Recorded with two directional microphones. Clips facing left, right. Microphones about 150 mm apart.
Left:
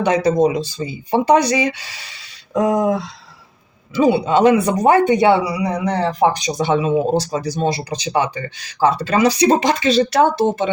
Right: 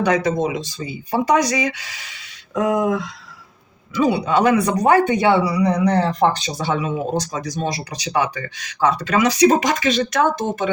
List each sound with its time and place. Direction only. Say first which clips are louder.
0.3 s speech: left 5 dB; 40° left (ahead or behind); by 6.3 s 5° left (ahead or behind)
6.3 s speech: left 5 dB; 15° left (ahead or behind)